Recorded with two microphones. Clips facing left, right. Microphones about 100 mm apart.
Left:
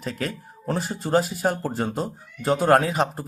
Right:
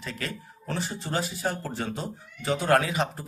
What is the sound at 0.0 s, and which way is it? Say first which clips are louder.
Speech: left 6 dB; 45° left (ahead or behind).